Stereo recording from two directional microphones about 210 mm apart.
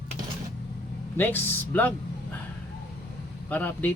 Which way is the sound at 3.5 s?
10° left (ahead or behind).